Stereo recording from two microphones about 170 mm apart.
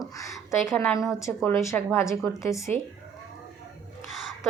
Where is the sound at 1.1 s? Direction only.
15° left (ahead or behind).